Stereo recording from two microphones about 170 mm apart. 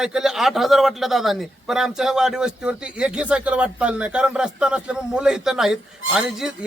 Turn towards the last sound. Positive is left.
turn(degrees=-5)  # may be behind; listen again after turning